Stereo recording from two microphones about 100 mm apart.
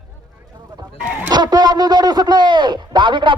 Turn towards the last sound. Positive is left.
turn(degrees=-55)  # may be behind; listen again after turning